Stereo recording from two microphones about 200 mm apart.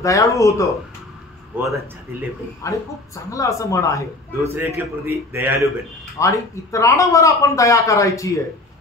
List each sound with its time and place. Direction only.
0.0 s speech: 15° left (ahead or behind)
1.5 s a man's voice: 10° right (ahead or behind)
2.6 s speech: 15° left (ahead or behind)
4.4 s a man's voice: 10° right (ahead or behind)
6.1 s speech: 15° left (ahead or behind)